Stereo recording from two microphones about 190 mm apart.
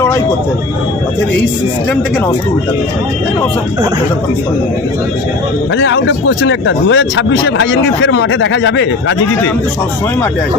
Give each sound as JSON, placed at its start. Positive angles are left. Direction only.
{"t": 5.7, "sound": "speech", "side_deg": 75}